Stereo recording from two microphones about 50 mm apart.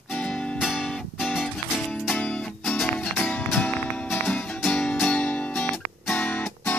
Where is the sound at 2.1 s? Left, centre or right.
Left.